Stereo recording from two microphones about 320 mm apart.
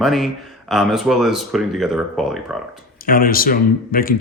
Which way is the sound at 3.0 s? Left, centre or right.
Left.